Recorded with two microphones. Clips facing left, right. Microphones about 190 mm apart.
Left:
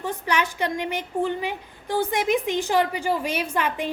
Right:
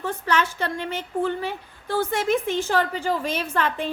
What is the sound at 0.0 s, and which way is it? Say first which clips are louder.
A woman's voice: right 1 dB; 15° left (ahead or behind).